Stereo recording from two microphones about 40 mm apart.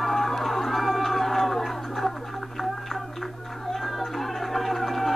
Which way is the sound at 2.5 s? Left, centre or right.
Centre.